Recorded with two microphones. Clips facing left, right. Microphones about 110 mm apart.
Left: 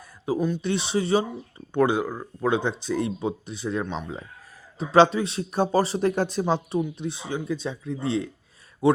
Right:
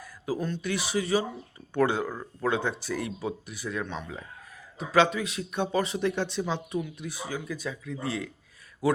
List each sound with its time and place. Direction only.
0.3 s speech: 10° left (ahead or behind)
0.6 s speech: 25° left (ahead or behind)
1.7 s speech: 15° left (ahead or behind)
3.8 s speech: 15° left (ahead or behind)
4.8 s a man's voice: 30° left (ahead or behind)